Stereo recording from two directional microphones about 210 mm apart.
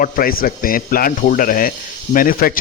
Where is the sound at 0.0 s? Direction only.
45° left (ahead or behind).